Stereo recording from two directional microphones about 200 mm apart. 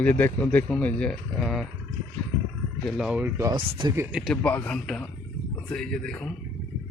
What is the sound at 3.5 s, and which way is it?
Speech, 25° right (ahead or behind).